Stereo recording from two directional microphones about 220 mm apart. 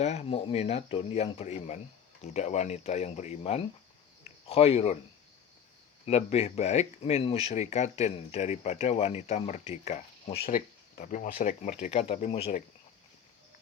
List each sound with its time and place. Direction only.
0.0 s speech: 30° left (ahead or behind)
6.1 s speech: 30° left (ahead or behind)